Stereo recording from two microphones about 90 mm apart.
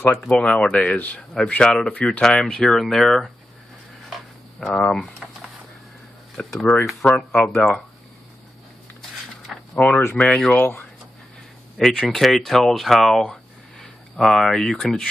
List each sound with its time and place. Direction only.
0.0 s speech: 10° left (ahead or behind)
4.1 s a sound: 5° left (ahead or behind)
6.3 s speech: 10° left (ahead or behind)
9.8 s speech: 20° left (ahead or behind)
11.8 s speech: 5° left (ahead or behind)